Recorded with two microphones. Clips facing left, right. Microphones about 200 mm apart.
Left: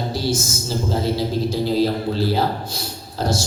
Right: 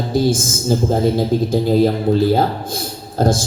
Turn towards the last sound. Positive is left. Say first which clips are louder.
# right 6 dB
turn(degrees=-50)  # may be behind; listen again after turning